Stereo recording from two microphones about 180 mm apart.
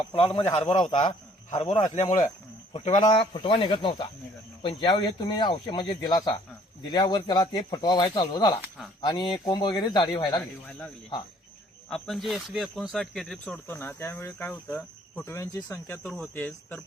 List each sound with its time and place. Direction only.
0.1 s a man's voice: 30° left (ahead or behind)
0.8 s speech: 25° left (ahead or behind)
2.7 s a man's voice: 35° left (ahead or behind)
10.7 s speech: 5° left (ahead or behind)